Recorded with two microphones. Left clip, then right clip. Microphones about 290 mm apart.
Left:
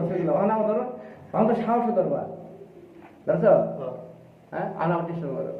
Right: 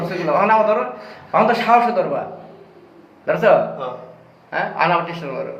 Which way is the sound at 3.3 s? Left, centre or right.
Right.